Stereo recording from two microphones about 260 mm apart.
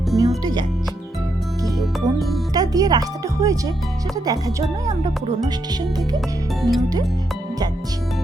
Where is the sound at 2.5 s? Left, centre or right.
Centre.